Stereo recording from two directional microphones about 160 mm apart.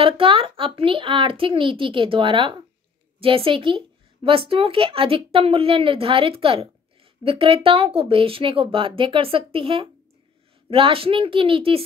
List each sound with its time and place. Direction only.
0.0 s speech: 35° right (ahead or behind)